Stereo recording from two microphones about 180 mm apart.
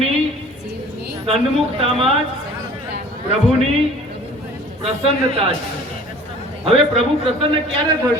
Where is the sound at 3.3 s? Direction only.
35° right (ahead or behind).